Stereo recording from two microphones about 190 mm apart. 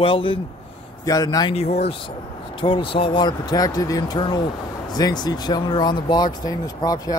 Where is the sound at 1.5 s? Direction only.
35° left (ahead or behind).